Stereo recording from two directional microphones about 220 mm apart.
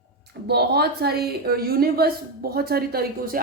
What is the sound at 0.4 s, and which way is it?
A woman's voice, 50° right (ahead or behind).